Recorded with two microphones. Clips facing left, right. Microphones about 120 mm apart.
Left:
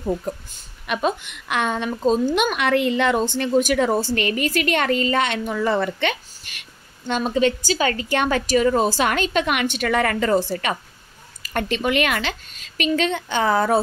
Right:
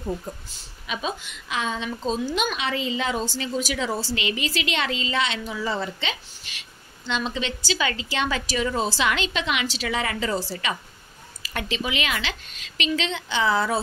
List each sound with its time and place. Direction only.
0.5 s a woman's voice: 60° left (ahead or behind)